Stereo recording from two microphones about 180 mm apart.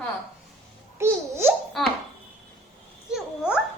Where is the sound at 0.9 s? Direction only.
15° right (ahead or behind).